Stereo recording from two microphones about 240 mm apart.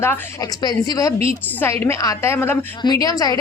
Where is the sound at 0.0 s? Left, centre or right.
Centre.